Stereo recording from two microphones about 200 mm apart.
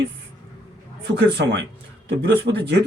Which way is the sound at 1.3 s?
60° right (ahead or behind).